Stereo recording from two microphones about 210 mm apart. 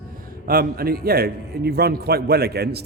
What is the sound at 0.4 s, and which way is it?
A man's voice, 45° right (ahead or behind).